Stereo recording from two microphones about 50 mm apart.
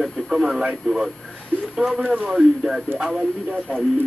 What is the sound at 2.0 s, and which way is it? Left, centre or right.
Speech, right.